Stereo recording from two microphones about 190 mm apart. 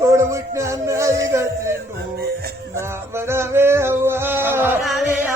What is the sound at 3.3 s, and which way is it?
Music, 15° right (ahead or behind).